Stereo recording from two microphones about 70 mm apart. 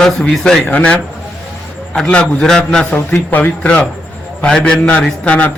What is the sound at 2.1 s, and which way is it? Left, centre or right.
Speech, centre.